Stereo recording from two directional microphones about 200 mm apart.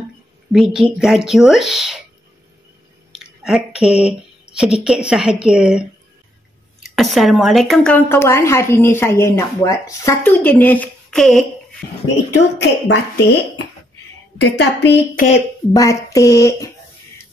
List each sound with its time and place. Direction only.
0.5 s a woman's voice: centre (ahead or behind)
3.1 s a sound: 5° right (ahead or behind)
4.8 s a woman's voice: 5° right (ahead or behind)
7.0 s a woman's voice: centre (ahead or behind)
12.4 s a woman's voice: 60° left (ahead or behind)
14.4 s a woman's voice: 60° left (ahead or behind)
15.7 s a woman's voice: 15° left (ahead or behind)